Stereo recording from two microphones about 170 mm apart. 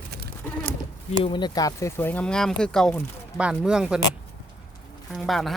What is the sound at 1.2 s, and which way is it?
A man's voice, 25° left (ahead or behind).